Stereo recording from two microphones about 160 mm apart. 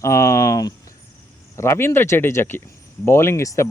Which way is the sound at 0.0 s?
20° left (ahead or behind).